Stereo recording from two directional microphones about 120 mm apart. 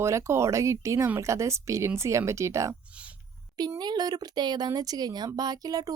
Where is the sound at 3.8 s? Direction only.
35° right (ahead or behind).